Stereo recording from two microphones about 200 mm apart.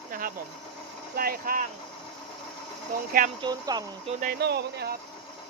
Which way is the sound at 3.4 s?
20° right (ahead or behind).